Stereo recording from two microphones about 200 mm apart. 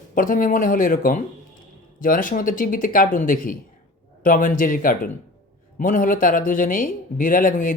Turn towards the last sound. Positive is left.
turn(degrees=45)  # may be behind; listen again after turning